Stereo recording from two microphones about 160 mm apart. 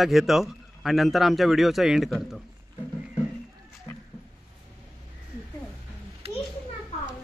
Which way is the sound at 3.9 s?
25° left (ahead or behind).